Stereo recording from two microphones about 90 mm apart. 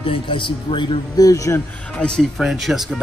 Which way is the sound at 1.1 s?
40° left (ahead or behind).